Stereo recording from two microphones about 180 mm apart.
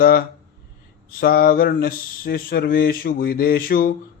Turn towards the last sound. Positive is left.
turn(degrees=55)  # may be behind; listen again after turning